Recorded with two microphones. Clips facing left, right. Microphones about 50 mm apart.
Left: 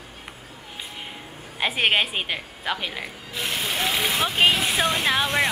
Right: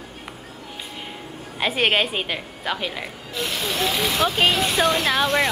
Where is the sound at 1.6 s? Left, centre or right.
Centre.